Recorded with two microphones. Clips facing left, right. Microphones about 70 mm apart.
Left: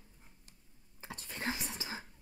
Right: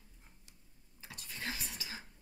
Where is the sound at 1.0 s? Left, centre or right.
Left.